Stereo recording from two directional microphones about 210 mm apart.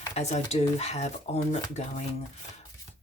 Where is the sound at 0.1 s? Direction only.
30° left (ahead or behind).